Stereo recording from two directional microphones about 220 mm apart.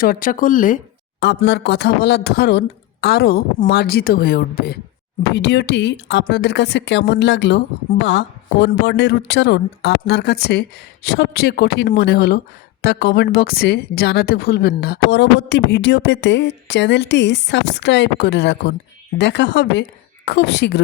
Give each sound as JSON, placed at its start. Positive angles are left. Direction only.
{"t": 0.0, "sound": "speech", "side_deg": 40}
{"t": 1.2, "sound": "speech", "side_deg": 50}